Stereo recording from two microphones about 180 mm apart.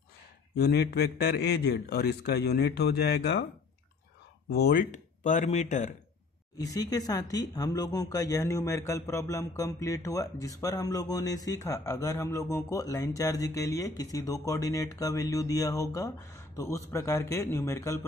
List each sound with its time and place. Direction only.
0.6 s a man's voice: 65° left (ahead or behind)
4.5 s speech: 60° left (ahead or behind); by 5.9 s 40° left (ahead or behind)
6.6 s speech: 20° left (ahead or behind)